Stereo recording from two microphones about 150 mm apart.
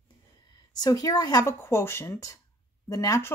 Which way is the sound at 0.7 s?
25° left (ahead or behind).